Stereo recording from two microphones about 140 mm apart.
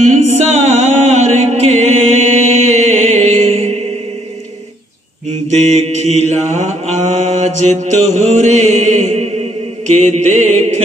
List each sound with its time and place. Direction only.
0.0 s music: 55° right (ahead or behind)
5.6 s mantra: 55° right (ahead or behind)